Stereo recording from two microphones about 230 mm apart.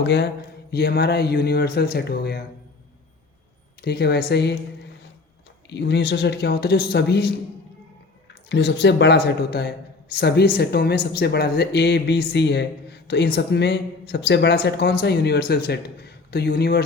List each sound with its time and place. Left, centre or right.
0.0 s speech: left
3.8 s speech: left
5.6 s speech: left
8.4 s speech: left